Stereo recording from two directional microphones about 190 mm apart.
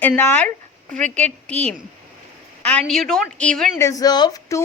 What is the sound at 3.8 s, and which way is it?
Speech, 20° left (ahead or behind).